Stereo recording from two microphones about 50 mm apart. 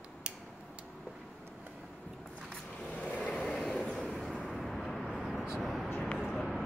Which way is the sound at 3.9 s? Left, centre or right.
Centre.